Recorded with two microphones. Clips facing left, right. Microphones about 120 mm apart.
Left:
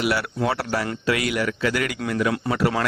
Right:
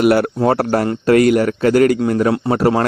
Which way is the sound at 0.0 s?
50° right (ahead or behind).